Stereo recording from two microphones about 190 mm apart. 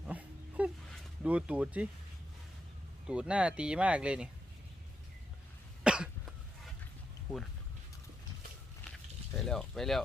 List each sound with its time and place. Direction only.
0.1 s a sound: 10° right (ahead or behind)
1.2 s speech: 5° right (ahead or behind)
3.1 s speech: 5° right (ahead or behind)
5.8 s cough: 5° right (ahead or behind)
9.4 s speech: 5° left (ahead or behind)